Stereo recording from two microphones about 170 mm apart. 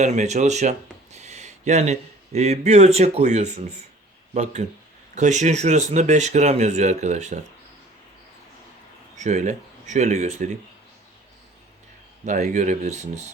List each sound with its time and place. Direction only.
0.0 s speech: 45° right (ahead or behind)
5.1 s speech: 45° right (ahead or behind)
9.1 s speech: 45° right (ahead or behind)
12.2 s speech: 45° right (ahead or behind)